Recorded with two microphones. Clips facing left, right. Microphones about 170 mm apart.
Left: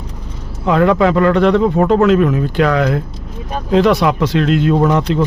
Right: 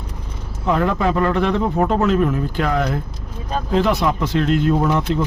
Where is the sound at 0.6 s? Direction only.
90° left.